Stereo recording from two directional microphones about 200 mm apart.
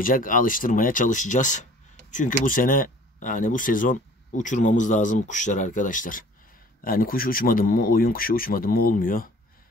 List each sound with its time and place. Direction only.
0.0 s speech: 45° left (ahead or behind)